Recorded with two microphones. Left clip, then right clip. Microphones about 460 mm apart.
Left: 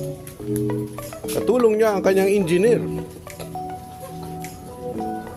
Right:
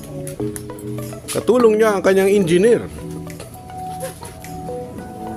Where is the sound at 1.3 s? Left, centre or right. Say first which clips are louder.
Right 4 dB; left.